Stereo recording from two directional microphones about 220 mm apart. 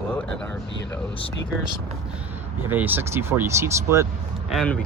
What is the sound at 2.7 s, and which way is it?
Speech, 10° right (ahead or behind).